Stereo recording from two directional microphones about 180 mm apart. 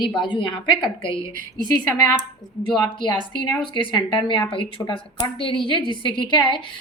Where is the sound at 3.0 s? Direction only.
25° left (ahead or behind).